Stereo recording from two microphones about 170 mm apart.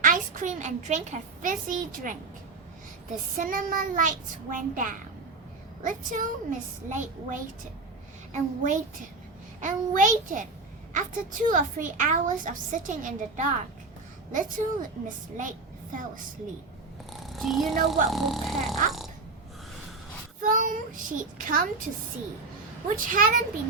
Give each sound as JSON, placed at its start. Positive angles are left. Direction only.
{"t": 0.0, "sound": "a woman's voice", "side_deg": -50}
{"t": 3.3, "sound": "a woman's voice", "side_deg": -55}
{"t": 17.1, "sound": "purr", "side_deg": 0}
{"t": 18.1, "sound": "speech", "side_deg": 0}
{"t": 20.4, "sound": "a woman's voice", "side_deg": -50}
{"t": 23.0, "sound": "a woman's voice", "side_deg": -50}